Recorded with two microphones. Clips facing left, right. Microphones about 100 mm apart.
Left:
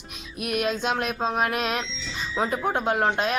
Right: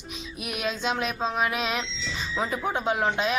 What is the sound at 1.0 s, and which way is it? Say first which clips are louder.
Speech: left 2 dB; 5° left (ahead or behind).